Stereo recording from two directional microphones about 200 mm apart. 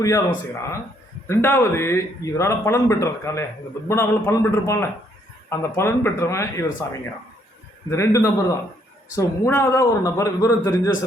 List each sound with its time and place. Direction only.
0.0 s speech: 15° left (ahead or behind)
7.9 s speech: 15° left (ahead or behind)